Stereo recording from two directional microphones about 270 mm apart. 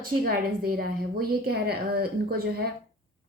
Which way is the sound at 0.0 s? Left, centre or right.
Right.